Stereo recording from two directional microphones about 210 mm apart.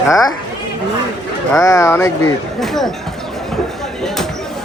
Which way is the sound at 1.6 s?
15° left (ahead or behind).